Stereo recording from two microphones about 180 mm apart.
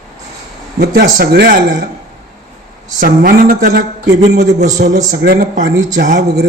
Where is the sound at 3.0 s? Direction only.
55° right (ahead or behind).